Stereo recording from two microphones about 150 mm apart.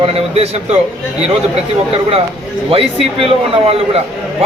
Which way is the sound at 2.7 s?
40° right (ahead or behind).